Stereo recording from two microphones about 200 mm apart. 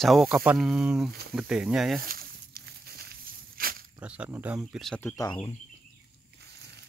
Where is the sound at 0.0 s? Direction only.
Centre (ahead or behind).